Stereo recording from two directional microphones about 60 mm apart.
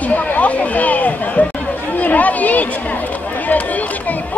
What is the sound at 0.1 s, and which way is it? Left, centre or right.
Chatter, left.